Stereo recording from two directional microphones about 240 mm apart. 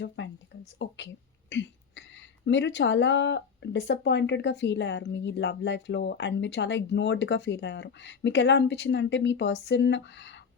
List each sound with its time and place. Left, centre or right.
0.2 s speech: left
0.8 s a sound: left
2.5 s speech: left